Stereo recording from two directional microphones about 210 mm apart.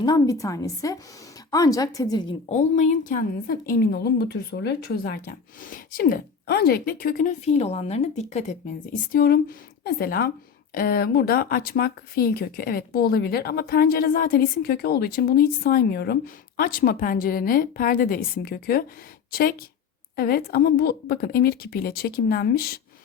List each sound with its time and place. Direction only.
0.0 s a woman's voice: 20° left (ahead or behind)
2.5 s speech: 35° left (ahead or behind)
9.1 s a woman's voice: 45° left (ahead or behind)